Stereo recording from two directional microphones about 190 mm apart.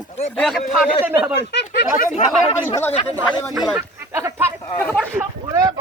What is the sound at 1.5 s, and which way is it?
Speech, 60° left (ahead or behind).